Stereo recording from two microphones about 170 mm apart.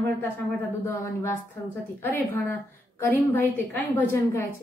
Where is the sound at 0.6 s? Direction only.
15° left (ahead or behind).